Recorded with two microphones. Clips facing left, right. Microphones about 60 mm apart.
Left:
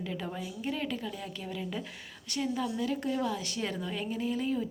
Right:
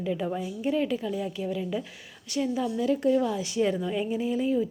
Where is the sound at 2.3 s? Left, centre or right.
Centre.